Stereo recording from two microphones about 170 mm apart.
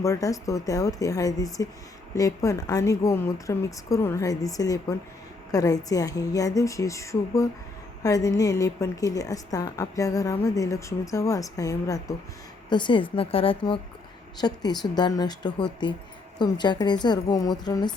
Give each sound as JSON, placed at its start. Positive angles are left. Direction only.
{"t": 0.0, "sound": "a woman's voice", "side_deg": 20}